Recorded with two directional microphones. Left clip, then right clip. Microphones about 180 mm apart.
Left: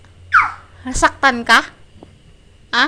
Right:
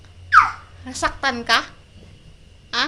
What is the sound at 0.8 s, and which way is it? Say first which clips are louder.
Speech: left 8 dB; 35° left (ahead or behind).